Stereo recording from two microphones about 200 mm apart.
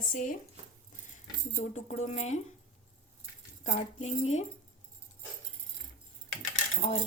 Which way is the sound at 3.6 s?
35° left (ahead or behind).